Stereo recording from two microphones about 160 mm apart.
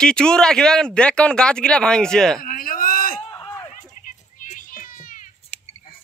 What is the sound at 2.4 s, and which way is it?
Speech, 60° left (ahead or behind).